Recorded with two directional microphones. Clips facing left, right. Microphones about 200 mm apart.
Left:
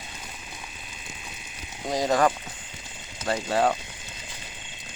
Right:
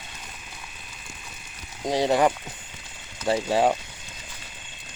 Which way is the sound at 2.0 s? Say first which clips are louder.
Even; 15° right (ahead or behind).